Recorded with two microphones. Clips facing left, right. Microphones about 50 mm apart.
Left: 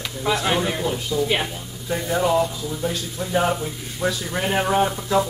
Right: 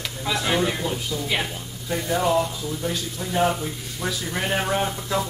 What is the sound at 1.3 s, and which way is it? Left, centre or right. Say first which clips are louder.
Speech: left 3 dB; centre.